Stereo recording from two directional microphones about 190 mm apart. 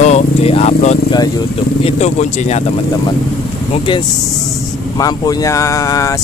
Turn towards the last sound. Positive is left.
turn(degrees=15)  # may be behind; listen again after turning